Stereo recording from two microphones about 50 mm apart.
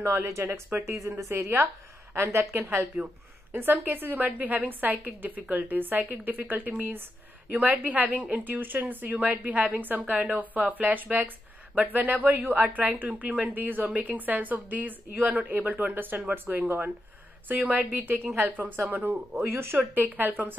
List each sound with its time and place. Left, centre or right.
0.0 s speech: right
0.5 s speech: right
0.9 s a woman's voice: right
2.1 s a woman's voice: right
2.5 s a woman's voice: right
19.9 s a woman's voice: right